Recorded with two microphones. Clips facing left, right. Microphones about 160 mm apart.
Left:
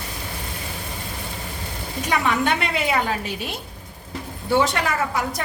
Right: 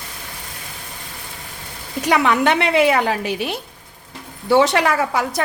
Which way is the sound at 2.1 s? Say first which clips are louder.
Right 5 dB; 80° right.